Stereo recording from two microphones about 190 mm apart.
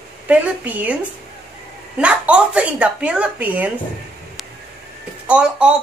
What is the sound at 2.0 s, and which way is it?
Speech, 5° right (ahead or behind).